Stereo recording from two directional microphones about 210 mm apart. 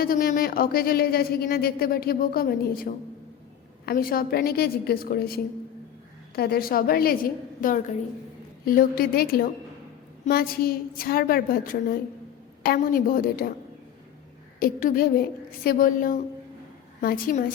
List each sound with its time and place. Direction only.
0.0 s speech: 45° left (ahead or behind)
14.6 s speech: 40° left (ahead or behind)